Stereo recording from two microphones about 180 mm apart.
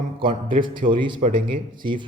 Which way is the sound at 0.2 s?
25° right (ahead or behind).